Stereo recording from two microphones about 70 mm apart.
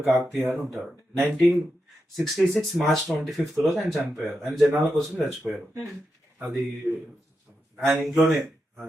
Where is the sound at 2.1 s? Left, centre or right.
Centre.